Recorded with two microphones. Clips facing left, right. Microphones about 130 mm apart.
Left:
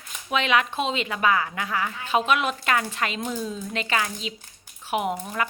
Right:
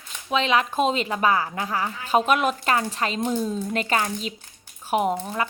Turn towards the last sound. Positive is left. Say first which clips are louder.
# right 3 dB
turn(degrees=-30)  # may be behind; listen again after turning